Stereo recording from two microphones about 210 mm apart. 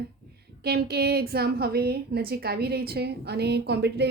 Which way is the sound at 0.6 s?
50° right (ahead or behind).